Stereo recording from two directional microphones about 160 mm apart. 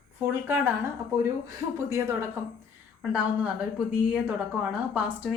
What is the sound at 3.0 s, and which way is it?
Speech, 5° right (ahead or behind).